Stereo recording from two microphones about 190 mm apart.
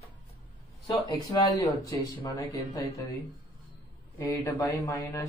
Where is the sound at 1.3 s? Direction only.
20° left (ahead or behind).